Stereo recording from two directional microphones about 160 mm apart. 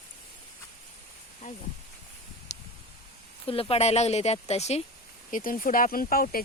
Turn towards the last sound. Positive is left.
turn(degrees=65)  # may be behind; listen again after turning